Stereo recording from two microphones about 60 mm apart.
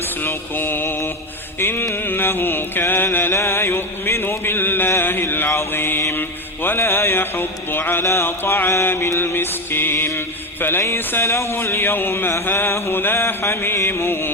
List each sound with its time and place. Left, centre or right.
0.2 s mantra: left
1.5 s music: left
4.9 s mantra: left
8.7 s music: left